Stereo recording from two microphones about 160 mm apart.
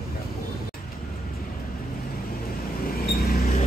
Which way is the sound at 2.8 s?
70° left (ahead or behind).